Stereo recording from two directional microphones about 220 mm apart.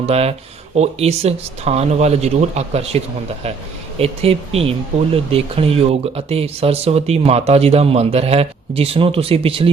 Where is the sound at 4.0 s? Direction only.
25° right (ahead or behind).